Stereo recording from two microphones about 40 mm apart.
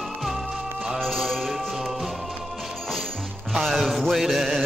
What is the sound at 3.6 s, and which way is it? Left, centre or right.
Music, centre.